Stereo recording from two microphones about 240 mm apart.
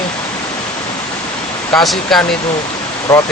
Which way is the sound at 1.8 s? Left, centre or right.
Centre.